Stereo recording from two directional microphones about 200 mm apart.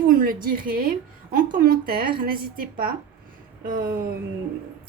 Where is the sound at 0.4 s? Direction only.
45° right (ahead or behind).